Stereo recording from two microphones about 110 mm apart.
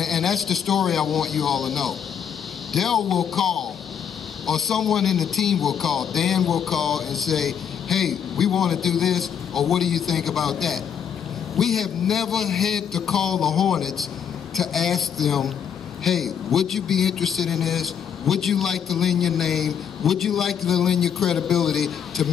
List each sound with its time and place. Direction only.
0.0 s a man's voice: centre (ahead or behind)